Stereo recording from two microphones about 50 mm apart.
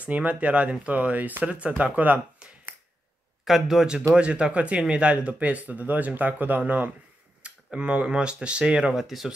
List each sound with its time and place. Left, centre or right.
0.0 s speech: right
3.4 s speech: centre
4.2 s speech: right
7.4 s speech: right
8.9 s speech: centre